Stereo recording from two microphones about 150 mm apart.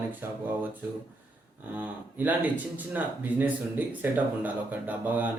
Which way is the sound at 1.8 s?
10° right (ahead or behind).